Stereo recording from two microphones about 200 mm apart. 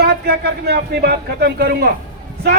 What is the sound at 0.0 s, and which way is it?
A woman's voice, 50° right (ahead or behind).